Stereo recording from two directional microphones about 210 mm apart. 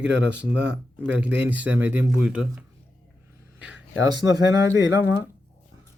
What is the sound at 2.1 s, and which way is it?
Speech, 5° right (ahead or behind).